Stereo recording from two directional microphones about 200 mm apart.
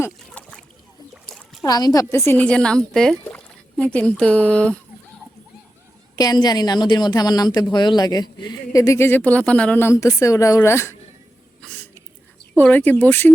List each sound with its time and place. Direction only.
0.0 s boat: 5° left (ahead or behind)
1.1 s splash: centre (ahead or behind)
1.6 s speech: 20° left (ahead or behind)
6.1 s a woman's voice: 20° left (ahead or behind)
11.6 s a sound: 10° left (ahead or behind)
12.5 s speech: 10° left (ahead or behind)